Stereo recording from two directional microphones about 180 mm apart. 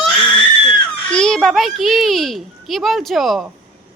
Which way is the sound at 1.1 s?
5° left (ahead or behind).